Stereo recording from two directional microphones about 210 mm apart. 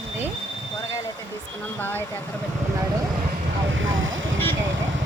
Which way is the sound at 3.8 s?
65° right (ahead or behind).